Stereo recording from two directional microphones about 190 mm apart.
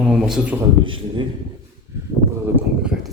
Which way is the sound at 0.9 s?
25° right (ahead or behind).